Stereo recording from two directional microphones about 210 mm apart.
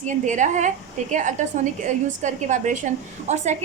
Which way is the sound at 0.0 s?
35° right (ahead or behind).